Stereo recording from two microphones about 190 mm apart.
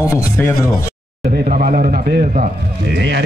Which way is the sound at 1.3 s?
50° right (ahead or behind).